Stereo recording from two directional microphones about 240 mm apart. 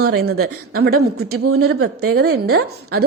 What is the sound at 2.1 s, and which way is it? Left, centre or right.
Speech, right.